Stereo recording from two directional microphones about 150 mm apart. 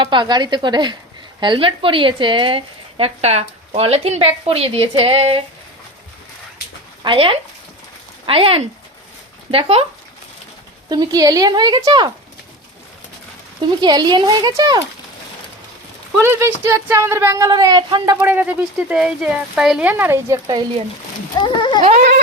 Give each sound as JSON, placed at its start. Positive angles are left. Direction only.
{"t": 0.0, "sound": "speech", "side_deg": -30}
{"t": 7.0, "sound": "speech", "side_deg": -35}
{"t": 10.8, "sound": "speech", "side_deg": -25}
{"t": 13.8, "sound": "speech", "side_deg": -30}
{"t": 16.2, "sound": "speech", "side_deg": -15}
{"t": 18.2, "sound": "speech", "side_deg": -10}
{"t": 21.4, "sound": "a sound", "side_deg": 30}
{"t": 21.8, "sound": "a sound", "side_deg": -50}